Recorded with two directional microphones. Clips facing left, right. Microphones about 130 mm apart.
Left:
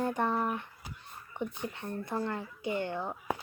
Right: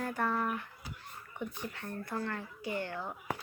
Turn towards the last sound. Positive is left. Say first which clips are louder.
# left 4 dB
turn(degrees=20)  # may be behind; listen again after turning